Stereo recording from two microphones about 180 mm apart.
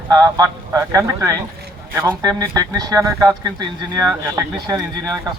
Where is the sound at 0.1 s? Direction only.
20° right (ahead or behind).